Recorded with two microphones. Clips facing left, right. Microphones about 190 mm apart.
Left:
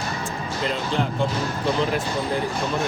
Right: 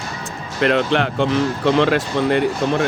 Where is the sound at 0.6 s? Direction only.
75° right (ahead or behind).